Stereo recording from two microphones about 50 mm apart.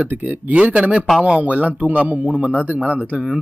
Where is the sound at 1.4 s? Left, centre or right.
Right.